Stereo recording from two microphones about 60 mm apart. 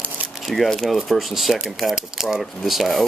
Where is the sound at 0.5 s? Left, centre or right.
Centre.